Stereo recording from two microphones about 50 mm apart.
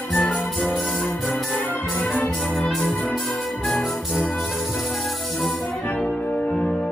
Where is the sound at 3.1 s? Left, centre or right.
Centre.